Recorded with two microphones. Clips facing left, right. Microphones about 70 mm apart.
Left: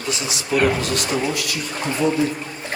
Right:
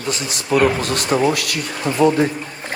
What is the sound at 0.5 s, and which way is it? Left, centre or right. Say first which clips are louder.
Speech: right 3 dB; centre.